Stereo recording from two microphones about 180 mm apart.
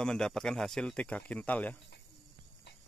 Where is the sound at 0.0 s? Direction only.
5° left (ahead or behind).